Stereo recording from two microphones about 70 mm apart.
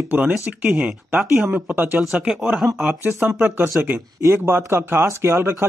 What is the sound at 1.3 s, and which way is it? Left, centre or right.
Speech, centre.